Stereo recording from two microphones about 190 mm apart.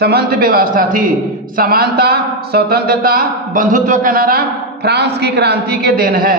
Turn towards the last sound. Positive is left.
turn(degrees=-50)  # may be behind; listen again after turning